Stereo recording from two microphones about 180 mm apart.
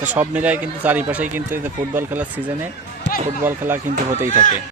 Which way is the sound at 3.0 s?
75° left (ahead or behind).